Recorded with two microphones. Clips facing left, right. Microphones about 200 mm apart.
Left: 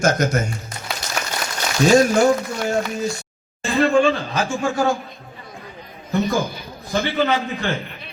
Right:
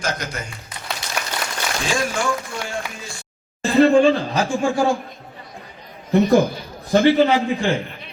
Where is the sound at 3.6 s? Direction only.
35° right (ahead or behind).